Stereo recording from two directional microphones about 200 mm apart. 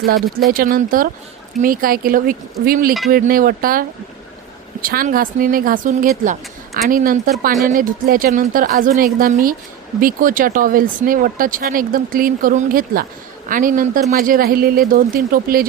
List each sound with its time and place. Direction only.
0.5 s speech: 45° right (ahead or behind)